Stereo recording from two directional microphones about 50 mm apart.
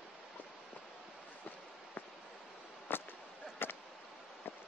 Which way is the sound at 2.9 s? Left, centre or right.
Left.